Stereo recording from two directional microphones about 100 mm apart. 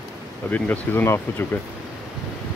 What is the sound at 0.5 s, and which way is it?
Speech, 20° left (ahead or behind).